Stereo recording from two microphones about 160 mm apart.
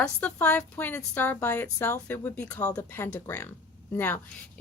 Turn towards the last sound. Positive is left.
turn(degrees=15)  # may be behind; listen again after turning